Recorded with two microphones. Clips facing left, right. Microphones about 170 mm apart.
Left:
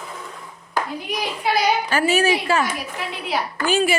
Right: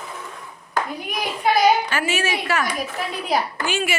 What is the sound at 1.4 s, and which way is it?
Speech, 50° right (ahead or behind).